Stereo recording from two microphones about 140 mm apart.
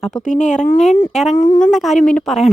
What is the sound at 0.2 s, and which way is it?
Speech, 60° left (ahead or behind).